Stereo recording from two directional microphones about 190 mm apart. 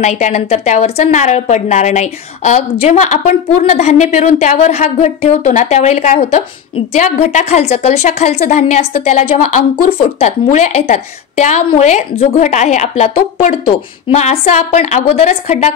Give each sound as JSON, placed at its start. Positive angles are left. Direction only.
{"t": 0.0, "sound": "a woman's voice", "side_deg": 40}
{"t": 9.4, "sound": "a woman's voice", "side_deg": 45}
{"t": 9.8, "sound": "a woman's voice", "side_deg": 30}